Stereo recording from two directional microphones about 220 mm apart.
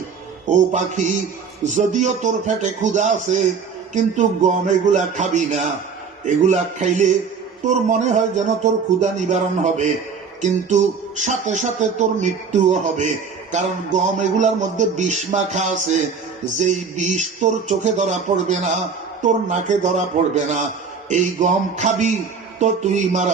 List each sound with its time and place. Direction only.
0.4 s speech: 35° right (ahead or behind)